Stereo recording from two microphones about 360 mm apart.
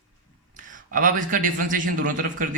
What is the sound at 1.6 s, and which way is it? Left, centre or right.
Speech, right.